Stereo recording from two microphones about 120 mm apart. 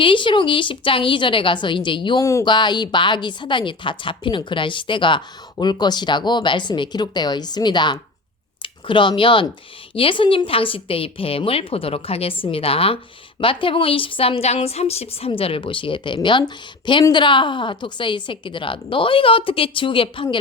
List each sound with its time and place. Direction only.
0.0 s a woman's voice: 45° left (ahead or behind)